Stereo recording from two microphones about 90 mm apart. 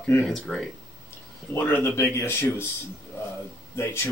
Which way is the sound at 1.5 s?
20° left (ahead or behind).